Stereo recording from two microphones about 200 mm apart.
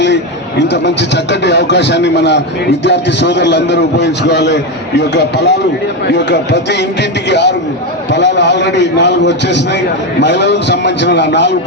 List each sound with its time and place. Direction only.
0.7 s a man's voice: 60° left (ahead or behind)